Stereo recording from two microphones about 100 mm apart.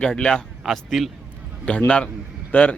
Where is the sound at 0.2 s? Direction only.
10° left (ahead or behind).